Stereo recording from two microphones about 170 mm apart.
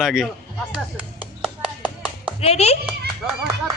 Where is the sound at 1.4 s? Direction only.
5° right (ahead or behind).